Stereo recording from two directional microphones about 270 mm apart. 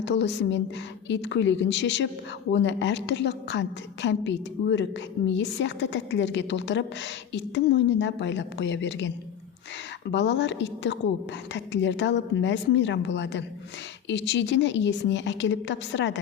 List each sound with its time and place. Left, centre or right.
0.0 s a woman's voice: left